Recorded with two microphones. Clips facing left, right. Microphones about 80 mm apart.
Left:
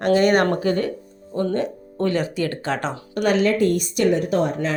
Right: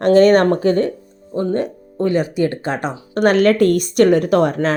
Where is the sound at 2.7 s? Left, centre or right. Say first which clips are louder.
Right 3 dB; centre.